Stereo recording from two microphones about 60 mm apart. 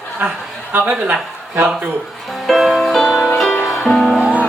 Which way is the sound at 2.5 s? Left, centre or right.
Centre.